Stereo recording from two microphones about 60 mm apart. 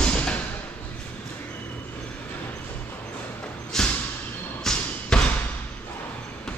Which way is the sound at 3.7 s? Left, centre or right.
Centre.